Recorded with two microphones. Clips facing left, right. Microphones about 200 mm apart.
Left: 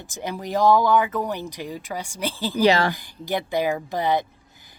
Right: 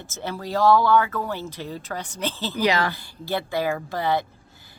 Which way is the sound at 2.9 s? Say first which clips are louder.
Left 2 dB; 15° left (ahead or behind).